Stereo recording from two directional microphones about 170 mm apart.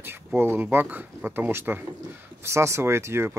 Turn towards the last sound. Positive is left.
turn(degrees=-15)  # may be behind; listen again after turning